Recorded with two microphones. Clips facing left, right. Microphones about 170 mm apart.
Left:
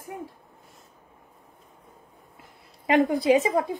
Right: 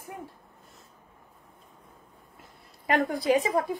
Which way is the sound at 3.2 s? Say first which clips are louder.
Left 3 dB; 20° left (ahead or behind).